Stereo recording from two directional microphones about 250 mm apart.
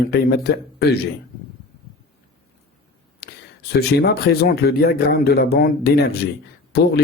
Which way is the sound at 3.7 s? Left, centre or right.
Left.